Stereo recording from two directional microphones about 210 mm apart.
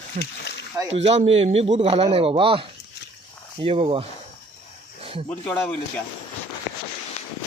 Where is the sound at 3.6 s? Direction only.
25° right (ahead or behind).